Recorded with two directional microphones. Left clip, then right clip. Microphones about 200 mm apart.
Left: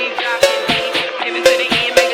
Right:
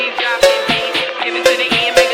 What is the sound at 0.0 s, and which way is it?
Music, 10° left (ahead or behind).